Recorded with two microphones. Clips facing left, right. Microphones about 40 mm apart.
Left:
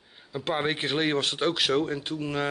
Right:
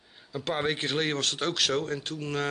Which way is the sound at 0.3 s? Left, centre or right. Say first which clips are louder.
Left 1 dB; centre.